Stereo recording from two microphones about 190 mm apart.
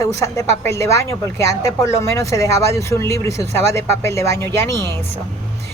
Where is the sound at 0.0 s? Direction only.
15° left (ahead or behind).